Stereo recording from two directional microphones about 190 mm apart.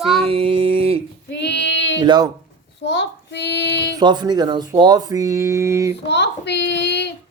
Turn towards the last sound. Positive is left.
turn(degrees=65)  # may be behind; listen again after turning